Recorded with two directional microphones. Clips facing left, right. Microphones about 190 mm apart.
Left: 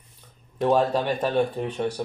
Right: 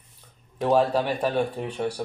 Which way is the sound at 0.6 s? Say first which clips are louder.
Even; 10° right (ahead or behind).